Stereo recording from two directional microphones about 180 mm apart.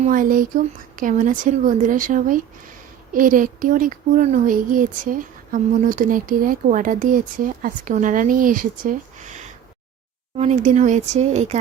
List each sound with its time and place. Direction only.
0.0 s a woman's voice: 50° right (ahead or behind)